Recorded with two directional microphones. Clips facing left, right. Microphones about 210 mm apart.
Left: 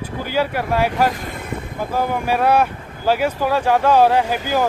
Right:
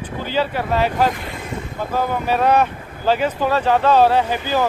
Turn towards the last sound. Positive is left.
turn(degrees=10)  # may be behind; listen again after turning